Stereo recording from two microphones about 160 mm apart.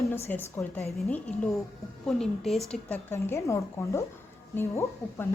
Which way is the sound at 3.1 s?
15° left (ahead or behind).